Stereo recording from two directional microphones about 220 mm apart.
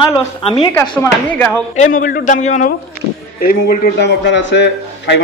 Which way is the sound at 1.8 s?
40° left (ahead or behind).